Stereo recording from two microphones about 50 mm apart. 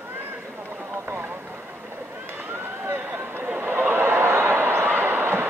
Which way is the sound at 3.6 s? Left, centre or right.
Right.